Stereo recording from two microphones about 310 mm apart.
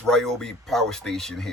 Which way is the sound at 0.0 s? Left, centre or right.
Centre.